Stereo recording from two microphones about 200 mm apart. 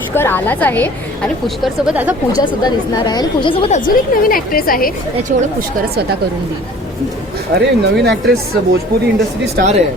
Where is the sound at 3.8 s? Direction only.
45° left (ahead or behind).